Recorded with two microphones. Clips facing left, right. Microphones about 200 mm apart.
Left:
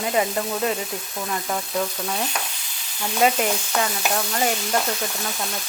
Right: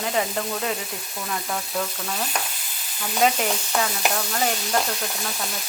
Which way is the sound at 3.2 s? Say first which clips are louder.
Left 1 dB; centre (ahead or behind).